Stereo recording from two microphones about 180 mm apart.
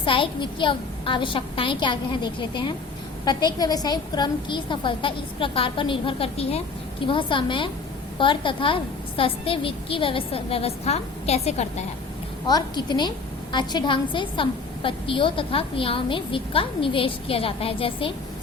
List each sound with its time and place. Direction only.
0.0 s a woman's voice: 30° left (ahead or behind)
12.5 s a woman's voice: 20° left (ahead or behind)